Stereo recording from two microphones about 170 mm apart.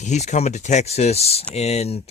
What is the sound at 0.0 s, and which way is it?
Speech, 45° left (ahead or behind).